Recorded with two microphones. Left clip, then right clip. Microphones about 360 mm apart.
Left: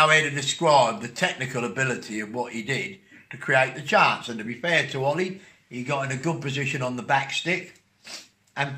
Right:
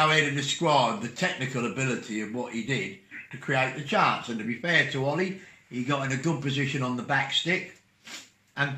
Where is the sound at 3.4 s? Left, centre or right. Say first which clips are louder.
Left 5 dB; left.